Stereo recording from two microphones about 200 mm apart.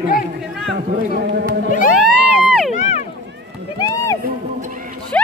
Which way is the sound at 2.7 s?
35° left (ahead or behind).